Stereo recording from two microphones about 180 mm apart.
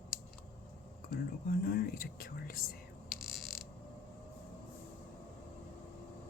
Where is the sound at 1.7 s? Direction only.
55° left (ahead or behind).